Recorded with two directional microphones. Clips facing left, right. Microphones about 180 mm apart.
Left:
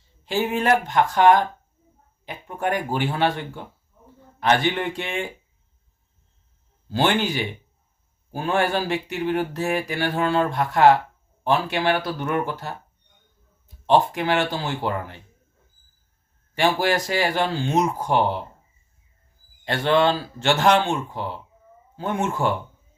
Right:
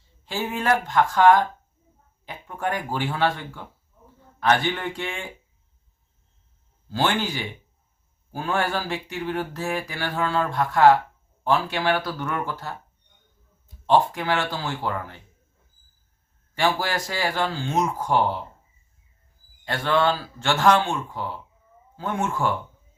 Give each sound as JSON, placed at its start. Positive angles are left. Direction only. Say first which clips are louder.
{"t": 0.3, "sound": "speech", "louder": "left 3 dB", "side_deg": 20}
{"t": 6.9, "sound": "speech", "louder": "left 3 dB", "side_deg": 20}
{"t": 13.8, "sound": "speech", "louder": "left 1 dB", "side_deg": 20}
{"t": 16.6, "sound": "speech", "louder": "left 3 dB", "side_deg": 20}
{"t": 19.6, "sound": "speech", "louder": "left 3 dB", "side_deg": 25}